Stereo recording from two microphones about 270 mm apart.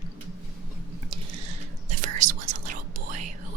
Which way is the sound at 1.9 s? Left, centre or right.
Right.